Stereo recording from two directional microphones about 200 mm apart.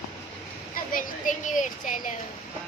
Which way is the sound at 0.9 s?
40° left (ahead or behind).